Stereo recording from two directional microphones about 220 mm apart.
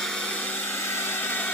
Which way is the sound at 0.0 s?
5° left (ahead or behind).